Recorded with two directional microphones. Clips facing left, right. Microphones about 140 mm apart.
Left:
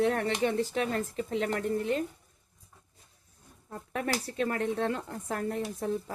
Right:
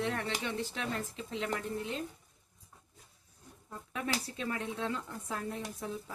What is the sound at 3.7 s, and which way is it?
Speech, 60° left (ahead or behind).